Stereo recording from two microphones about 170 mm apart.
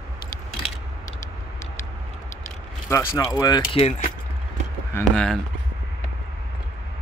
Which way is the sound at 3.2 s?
20° left (ahead or behind).